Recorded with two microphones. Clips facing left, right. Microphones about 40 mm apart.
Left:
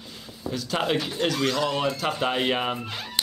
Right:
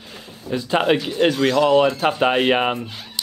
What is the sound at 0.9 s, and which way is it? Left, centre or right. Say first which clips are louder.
Speech: right 7 dB; right.